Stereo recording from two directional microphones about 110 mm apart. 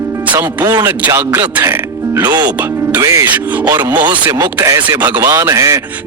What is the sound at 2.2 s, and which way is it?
Speech, 40° right (ahead or behind).